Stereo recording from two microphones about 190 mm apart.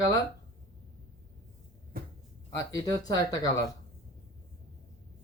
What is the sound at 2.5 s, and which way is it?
Speech, 20° left (ahead or behind).